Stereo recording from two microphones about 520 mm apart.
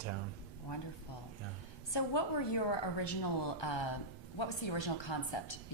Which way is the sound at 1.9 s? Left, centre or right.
Left.